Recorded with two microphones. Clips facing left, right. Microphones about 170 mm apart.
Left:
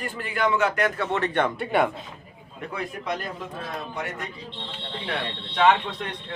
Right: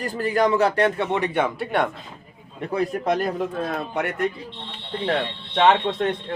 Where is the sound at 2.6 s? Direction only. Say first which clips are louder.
Right 8 dB; 35° right (ahead or behind); by 4.3 s 60° right (ahead or behind).